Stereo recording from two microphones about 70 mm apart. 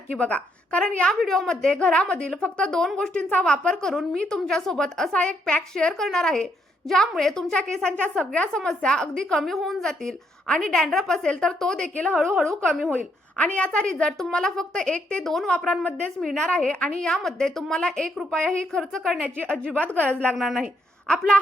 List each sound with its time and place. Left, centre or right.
0.2 s a woman's voice: centre
1.2 s a woman's voice: centre
13.3 s a woman's voice: centre
15.5 s a woman's voice: centre
16.2 s a woman's voice: centre
19.4 s a woman's voice: centre
20.3 s a woman's voice: centre
21.1 s a woman's voice: centre